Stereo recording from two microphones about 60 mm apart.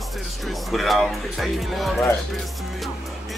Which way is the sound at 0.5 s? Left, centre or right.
Centre.